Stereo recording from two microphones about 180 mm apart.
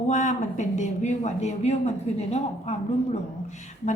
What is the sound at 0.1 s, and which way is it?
A woman's voice, 40° left (ahead or behind).